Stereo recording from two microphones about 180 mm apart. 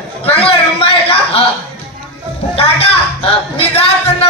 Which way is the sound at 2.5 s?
30° left (ahead or behind).